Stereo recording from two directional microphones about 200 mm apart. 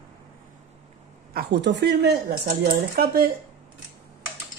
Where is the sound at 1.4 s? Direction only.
55° right (ahead or behind).